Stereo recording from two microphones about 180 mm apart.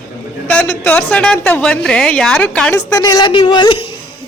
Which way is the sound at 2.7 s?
20° left (ahead or behind).